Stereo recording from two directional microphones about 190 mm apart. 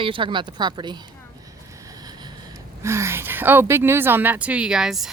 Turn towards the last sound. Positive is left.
turn(degrees=0)  # may be behind; listen again after turning